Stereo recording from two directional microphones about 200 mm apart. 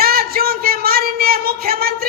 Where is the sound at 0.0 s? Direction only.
50° right (ahead or behind).